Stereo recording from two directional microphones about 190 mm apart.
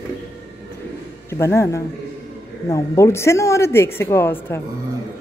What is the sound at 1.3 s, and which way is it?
A man's voice, 15° left (ahead or behind).